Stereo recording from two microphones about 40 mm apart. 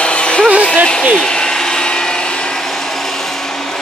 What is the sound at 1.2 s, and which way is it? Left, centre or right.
Vacuum cleaner, left.